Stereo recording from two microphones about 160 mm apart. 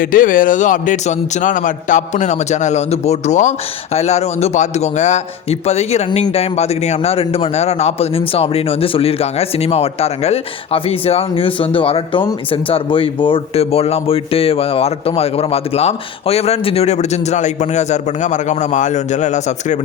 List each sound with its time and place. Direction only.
0.0 s a man's voice: 60° left (ahead or behind)